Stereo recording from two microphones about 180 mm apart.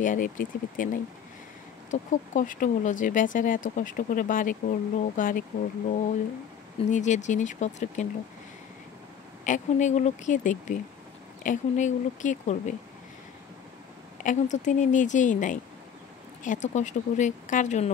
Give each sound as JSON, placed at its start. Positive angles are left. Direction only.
{"t": 0.0, "sound": "speech", "side_deg": 45}
{"t": 1.9, "sound": "speech", "side_deg": 45}
{"t": 6.9, "sound": "speech", "side_deg": 40}
{"t": 9.5, "sound": "speech", "side_deg": 40}
{"t": 14.2, "sound": "speech", "side_deg": 40}